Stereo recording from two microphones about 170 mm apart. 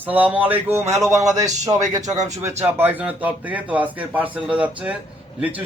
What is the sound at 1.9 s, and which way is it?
Speech, 20° right (ahead or behind).